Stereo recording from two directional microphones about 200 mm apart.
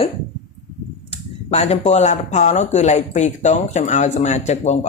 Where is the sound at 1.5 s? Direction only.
35° left (ahead or behind).